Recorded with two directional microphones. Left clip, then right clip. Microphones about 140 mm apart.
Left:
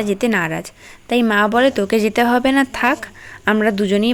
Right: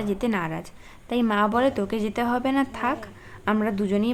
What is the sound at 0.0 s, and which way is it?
A woman's voice, 30° left (ahead or behind).